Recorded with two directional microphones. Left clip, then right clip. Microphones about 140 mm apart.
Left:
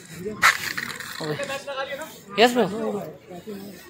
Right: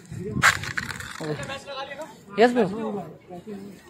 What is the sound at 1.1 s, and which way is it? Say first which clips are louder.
Speech: left 5 dB; 25° right (ahead or behind).